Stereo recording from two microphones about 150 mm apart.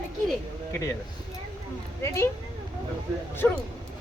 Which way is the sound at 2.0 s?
20° left (ahead or behind).